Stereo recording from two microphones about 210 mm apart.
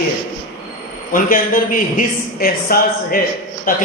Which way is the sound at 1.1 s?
40° left (ahead or behind).